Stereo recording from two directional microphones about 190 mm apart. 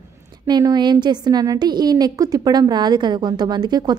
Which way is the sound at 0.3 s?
20° right (ahead or behind).